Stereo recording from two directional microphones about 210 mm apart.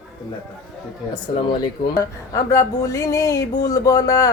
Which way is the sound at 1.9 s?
15° left (ahead or behind).